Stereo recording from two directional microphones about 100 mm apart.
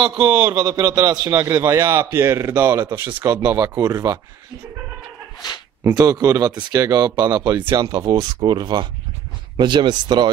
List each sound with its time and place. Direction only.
0.2 s a man's voice: 45° right (ahead or behind)
1.3 s speech: 25° right (ahead or behind)
5.9 s a man's voice: 40° right (ahead or behind)